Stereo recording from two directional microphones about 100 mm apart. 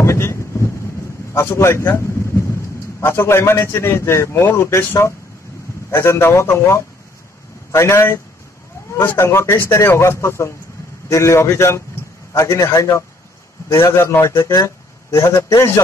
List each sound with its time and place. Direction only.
0.0 s boat: 25° left (ahead or behind)
1.3 s a man's voice: 25° left (ahead or behind)